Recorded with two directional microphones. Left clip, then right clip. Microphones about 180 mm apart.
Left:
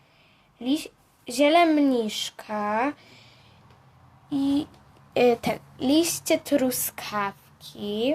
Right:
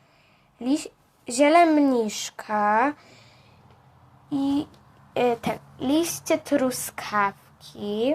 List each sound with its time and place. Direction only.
0.6 s speech: 10° right (ahead or behind)
4.4 s speech: 20° right (ahead or behind)
5.1 s speech: 25° left (ahead or behind)
5.4 s a woman's voice: 15° left (ahead or behind); by 8.1 s centre (ahead or behind)